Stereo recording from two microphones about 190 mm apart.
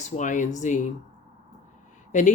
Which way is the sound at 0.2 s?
40° left (ahead or behind).